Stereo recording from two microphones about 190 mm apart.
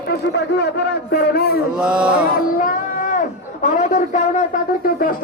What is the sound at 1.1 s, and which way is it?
Speech, 55° left (ahead or behind).